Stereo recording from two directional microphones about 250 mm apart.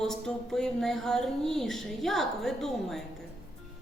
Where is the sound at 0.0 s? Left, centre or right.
Centre.